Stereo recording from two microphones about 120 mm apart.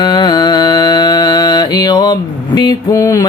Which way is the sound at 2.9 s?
25° left (ahead or behind).